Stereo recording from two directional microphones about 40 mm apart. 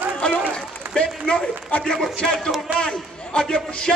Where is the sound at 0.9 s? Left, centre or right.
Left.